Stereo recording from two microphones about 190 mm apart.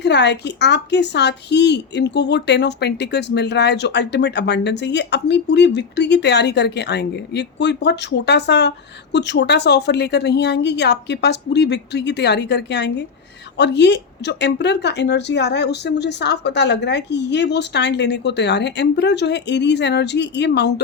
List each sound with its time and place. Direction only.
0.0 s speech: 65° left (ahead or behind)